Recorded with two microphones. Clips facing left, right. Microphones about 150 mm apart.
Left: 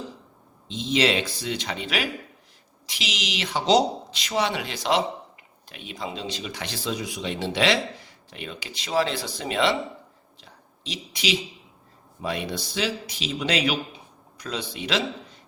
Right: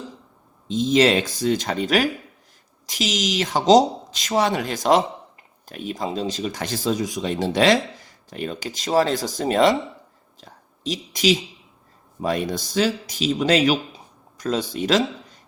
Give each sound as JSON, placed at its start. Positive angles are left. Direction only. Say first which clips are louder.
{"t": 0.7, "sound": "speech", "louder": "right 6 dB", "side_deg": -45}
{"t": 10.4, "sound": "a sound", "louder": "right 10 dB", "side_deg": -45}
{"t": 12.2, "sound": "speech", "louder": "right 6 dB", "side_deg": -45}